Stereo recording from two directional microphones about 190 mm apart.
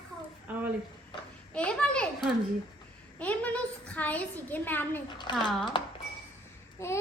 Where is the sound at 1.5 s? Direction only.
5° left (ahead or behind).